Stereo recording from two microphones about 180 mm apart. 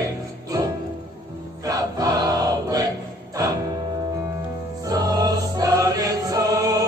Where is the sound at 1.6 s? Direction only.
20° right (ahead or behind).